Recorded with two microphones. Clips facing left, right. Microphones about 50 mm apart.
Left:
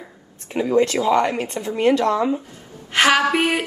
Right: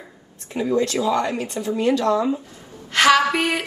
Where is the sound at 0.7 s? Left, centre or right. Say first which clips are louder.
Left 4 dB; left.